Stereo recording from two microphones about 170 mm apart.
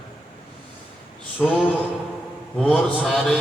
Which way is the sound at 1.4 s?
5° left (ahead or behind).